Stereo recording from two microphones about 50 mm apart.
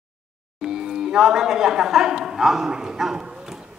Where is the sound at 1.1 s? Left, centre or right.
Centre.